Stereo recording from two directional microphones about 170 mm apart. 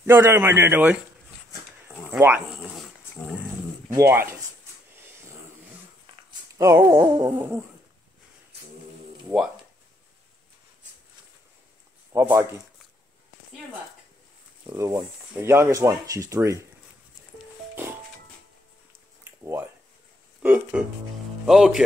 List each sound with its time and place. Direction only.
0.0 s speech: 15° right (ahead or behind)
2.0 s speech: 15° right (ahead or behind)
3.9 s speech: 15° right (ahead or behind)
4.9 s a sound: 15° right (ahead or behind)
6.6 s speech: 15° right (ahead or behind)
12.1 s speech: 15° right (ahead or behind)
14.7 s speech: 15° right (ahead or behind)
20.4 s speech: 10° right (ahead or behind)